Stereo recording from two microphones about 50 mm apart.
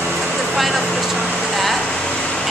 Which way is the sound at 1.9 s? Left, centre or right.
Centre.